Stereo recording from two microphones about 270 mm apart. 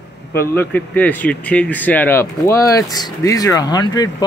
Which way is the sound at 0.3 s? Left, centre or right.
Centre.